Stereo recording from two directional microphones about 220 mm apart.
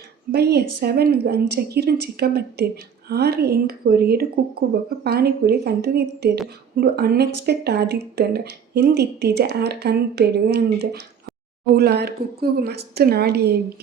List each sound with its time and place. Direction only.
0.3 s speech: 45° right (ahead or behind)